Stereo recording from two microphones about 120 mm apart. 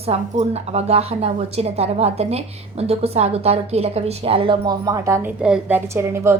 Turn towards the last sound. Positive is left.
turn(degrees=-20)  # may be behind; listen again after turning